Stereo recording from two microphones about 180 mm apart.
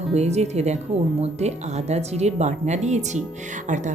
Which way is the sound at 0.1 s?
35° right (ahead or behind).